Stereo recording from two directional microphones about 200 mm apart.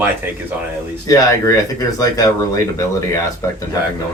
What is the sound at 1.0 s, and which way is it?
Speech, 15° left (ahead or behind).